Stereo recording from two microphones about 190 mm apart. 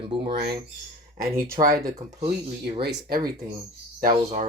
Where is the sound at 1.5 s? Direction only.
50° right (ahead or behind).